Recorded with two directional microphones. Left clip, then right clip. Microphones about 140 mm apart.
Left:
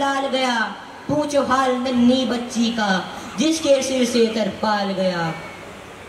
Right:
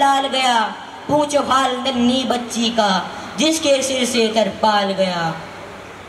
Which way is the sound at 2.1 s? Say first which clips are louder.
Right 2 dB; 55° right (ahead or behind).